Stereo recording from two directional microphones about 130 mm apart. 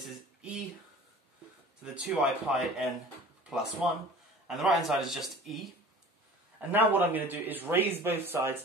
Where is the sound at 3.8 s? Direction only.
5° right (ahead or behind).